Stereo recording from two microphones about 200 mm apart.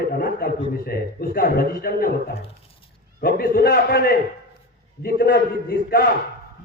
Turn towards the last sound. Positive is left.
turn(degrees=50)  # may be behind; listen again after turning